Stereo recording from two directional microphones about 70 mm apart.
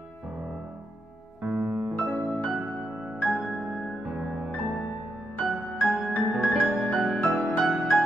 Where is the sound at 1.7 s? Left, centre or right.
Centre.